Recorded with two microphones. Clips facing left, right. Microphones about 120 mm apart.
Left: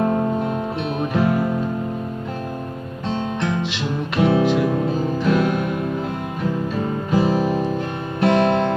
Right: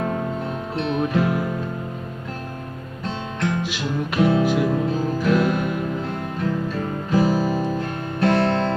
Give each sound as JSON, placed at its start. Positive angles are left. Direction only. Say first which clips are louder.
{"t": 1.1, "sound": "music", "louder": "left 5 dB", "side_deg": 0}
{"t": 3.6, "sound": "music", "louder": "left 1 dB", "side_deg": -5}
{"t": 7.1, "sound": "music", "louder": "even", "side_deg": 20}